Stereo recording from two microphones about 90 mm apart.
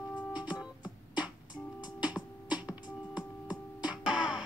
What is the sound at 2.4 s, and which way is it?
Music, 15° right (ahead or behind).